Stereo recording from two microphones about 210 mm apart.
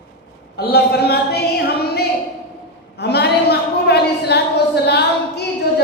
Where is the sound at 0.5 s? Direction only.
50° left (ahead or behind).